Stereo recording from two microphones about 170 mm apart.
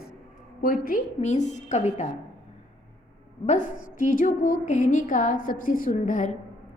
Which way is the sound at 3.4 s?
45° left (ahead or behind).